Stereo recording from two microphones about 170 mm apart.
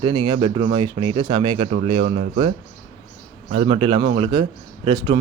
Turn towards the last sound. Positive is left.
turn(degrees=-25)  # may be behind; listen again after turning